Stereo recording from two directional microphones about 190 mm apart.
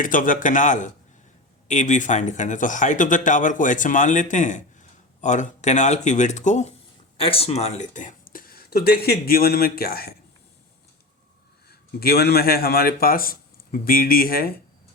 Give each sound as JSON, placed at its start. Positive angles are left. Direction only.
{"t": 0.0, "sound": "speech", "side_deg": 45}
{"t": 11.7, "sound": "a man's voice", "side_deg": 55}